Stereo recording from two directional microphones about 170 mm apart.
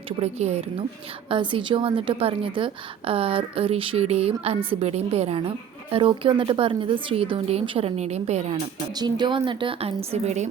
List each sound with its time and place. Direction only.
0.2 s a woman's voice: 40° right (ahead or behind)
1.3 s a woman's voice: 30° right (ahead or behind)